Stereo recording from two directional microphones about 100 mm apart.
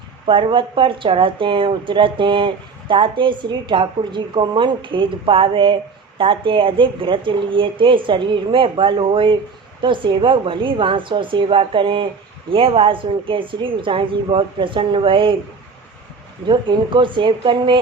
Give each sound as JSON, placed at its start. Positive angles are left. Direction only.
{"t": 0.3, "sound": "a woman's voice", "side_deg": -60}
{"t": 16.5, "sound": "speech", "side_deg": -50}